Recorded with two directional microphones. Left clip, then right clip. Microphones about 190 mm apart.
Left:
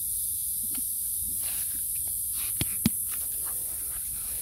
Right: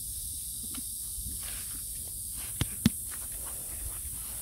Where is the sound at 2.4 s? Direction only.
10° left (ahead or behind).